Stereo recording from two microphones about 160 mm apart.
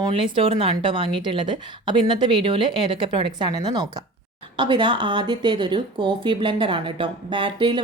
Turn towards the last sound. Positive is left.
turn(degrees=-30)  # may be behind; listen again after turning